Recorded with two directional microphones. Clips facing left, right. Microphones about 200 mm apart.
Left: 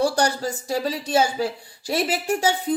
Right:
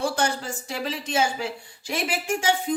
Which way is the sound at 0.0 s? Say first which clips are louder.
Left 4 dB; 40° left (ahead or behind).